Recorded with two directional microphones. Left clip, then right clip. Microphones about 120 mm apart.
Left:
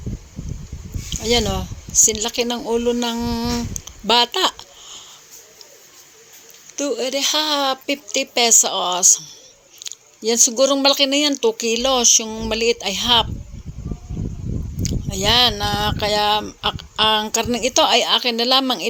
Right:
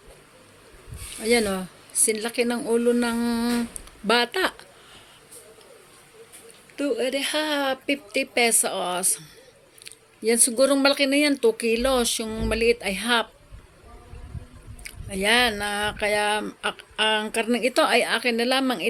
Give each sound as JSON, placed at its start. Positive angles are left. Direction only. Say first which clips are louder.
{"t": 1.2, "sound": "speech", "louder": "left 3 dB", "side_deg": 35}
{"t": 3.8, "sound": "speech", "louder": "left 6 dB", "side_deg": 40}
{"t": 6.7, "sound": "a woman's voice", "louder": "left 3 dB", "side_deg": 55}
{"t": 14.8, "sound": "speech", "louder": "left 4 dB", "side_deg": 40}